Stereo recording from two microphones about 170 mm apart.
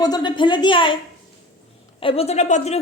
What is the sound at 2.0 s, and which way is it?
Speech, 35° left (ahead or behind).